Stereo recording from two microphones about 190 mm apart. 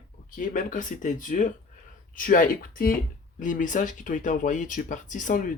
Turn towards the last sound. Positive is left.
turn(degrees=45)  # may be behind; listen again after turning